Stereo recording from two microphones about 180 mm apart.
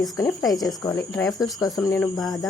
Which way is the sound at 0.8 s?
20° left (ahead or behind).